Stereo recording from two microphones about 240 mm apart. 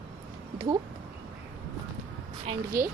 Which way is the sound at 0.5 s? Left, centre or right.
Centre.